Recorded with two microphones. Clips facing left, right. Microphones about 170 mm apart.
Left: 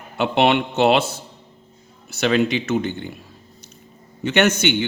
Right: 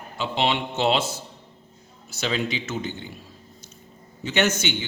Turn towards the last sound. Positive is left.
turn(degrees=65)  # may be behind; listen again after turning